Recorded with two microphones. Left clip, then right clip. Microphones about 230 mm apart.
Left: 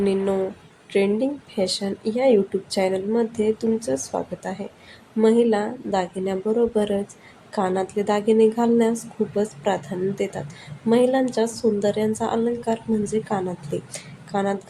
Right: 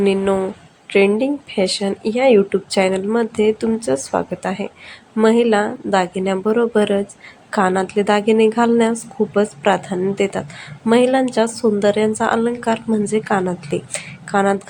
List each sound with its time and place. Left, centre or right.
0.0 s speech: centre